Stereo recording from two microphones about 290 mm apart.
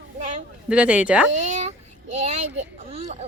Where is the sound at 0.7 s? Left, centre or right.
Centre.